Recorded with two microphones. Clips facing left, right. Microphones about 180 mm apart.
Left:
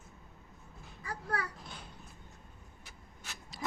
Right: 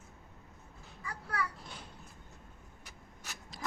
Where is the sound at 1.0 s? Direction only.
45° left (ahead or behind).